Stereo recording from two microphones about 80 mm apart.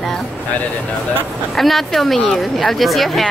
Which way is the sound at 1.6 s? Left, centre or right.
Centre.